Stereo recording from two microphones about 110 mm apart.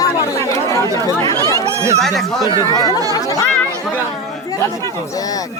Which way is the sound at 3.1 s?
30° left (ahead or behind).